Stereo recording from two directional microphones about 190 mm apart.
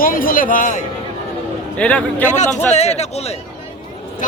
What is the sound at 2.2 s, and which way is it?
Speech, 40° left (ahead or behind).